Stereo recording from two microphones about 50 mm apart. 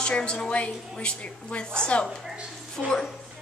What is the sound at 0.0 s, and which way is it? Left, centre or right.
A woman's voice, centre.